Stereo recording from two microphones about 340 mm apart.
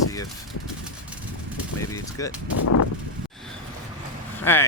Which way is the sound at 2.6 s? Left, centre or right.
Left.